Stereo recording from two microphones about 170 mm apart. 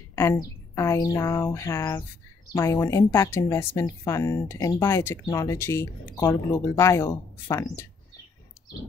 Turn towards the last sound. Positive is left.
turn(degrees=15)  # may be behind; listen again after turning